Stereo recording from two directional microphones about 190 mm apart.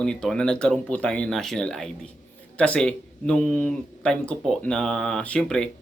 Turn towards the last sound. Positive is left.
turn(degrees=5)  # may be behind; listen again after turning